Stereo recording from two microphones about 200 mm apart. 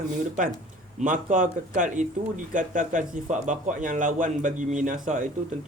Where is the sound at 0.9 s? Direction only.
40° right (ahead or behind).